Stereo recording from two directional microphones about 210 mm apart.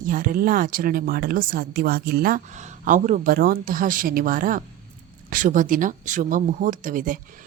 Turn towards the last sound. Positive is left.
turn(degrees=-40)  # may be behind; listen again after turning